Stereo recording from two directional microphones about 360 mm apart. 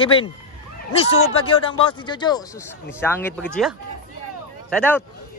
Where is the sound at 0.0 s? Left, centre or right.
Centre.